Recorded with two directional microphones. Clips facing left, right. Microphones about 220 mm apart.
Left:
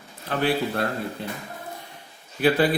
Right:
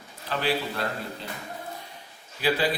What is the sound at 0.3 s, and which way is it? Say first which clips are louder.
Speech: left 4 dB; 55° left (ahead or behind).